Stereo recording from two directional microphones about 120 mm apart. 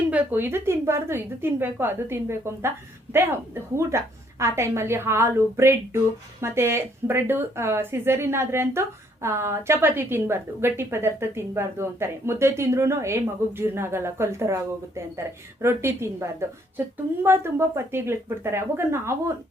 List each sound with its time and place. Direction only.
0.1 s speech: 15° right (ahead or behind)